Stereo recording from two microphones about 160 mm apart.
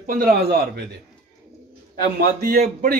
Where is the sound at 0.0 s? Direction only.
65° right (ahead or behind); by 0.8 s 90° right.